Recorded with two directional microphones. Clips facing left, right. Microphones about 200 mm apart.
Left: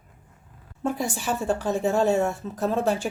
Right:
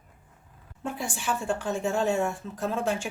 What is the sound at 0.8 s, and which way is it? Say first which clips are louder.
A woman's voice: left 5 dB; 40° left (ahead or behind).